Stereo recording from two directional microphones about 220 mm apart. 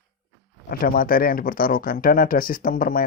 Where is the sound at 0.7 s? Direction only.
40° left (ahead or behind).